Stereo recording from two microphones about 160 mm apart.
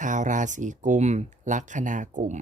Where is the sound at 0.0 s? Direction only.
50° right (ahead or behind).